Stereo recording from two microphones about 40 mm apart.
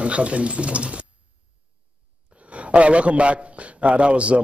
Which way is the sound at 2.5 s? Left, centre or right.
Right.